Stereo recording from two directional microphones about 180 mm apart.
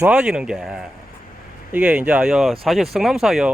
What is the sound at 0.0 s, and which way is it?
Speech, 5° right (ahead or behind).